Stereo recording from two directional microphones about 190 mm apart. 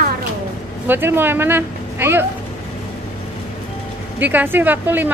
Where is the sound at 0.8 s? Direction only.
10° right (ahead or behind).